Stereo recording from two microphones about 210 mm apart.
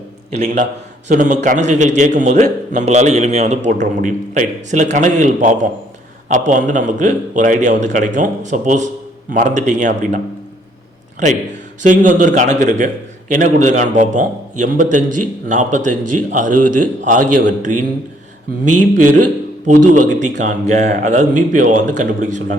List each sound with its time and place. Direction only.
0.3 s a man's voice: 35° right (ahead or behind)
11.8 s a man's voice: 35° right (ahead or behind)